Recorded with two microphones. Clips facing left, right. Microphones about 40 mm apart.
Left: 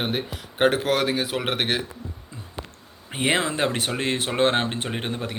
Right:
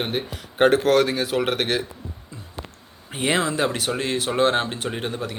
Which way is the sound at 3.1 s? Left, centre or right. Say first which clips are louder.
Right 1 dB; left.